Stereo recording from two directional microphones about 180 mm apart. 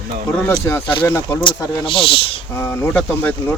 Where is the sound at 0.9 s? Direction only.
25° left (ahead or behind).